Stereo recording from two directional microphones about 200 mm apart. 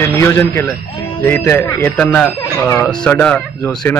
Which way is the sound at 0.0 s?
10° left (ahead or behind).